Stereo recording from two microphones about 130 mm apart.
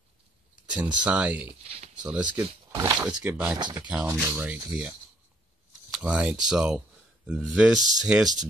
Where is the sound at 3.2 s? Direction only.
10° right (ahead or behind).